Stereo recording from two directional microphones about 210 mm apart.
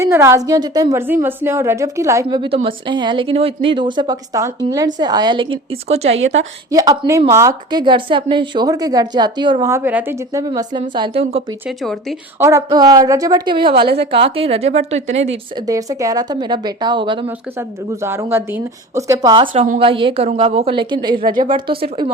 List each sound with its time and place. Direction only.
0.0 s a woman's voice: 10° right (ahead or behind); by 6.1 s 30° right (ahead or behind)
6.7 s a woman's voice: 15° right (ahead or behind)
11.8 s speech: centre (ahead or behind)
12.4 s a woman's voice: 15° right (ahead or behind); by 15.6 s 30° right (ahead or behind)
15.6 s a woman's voice: 15° right (ahead or behind)
17.2 s a woman's voice: 10° right (ahead or behind)